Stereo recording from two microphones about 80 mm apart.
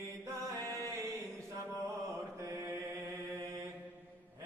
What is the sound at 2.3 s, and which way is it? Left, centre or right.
Mantra, right.